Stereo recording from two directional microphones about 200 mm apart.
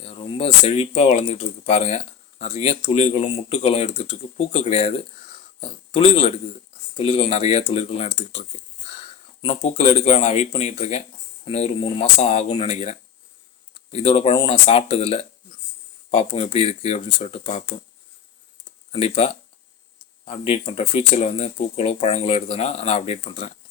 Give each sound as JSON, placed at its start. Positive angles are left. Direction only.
{"t": 0.0, "sound": "speech", "side_deg": 30}
{"t": 18.9, "sound": "speech", "side_deg": 30}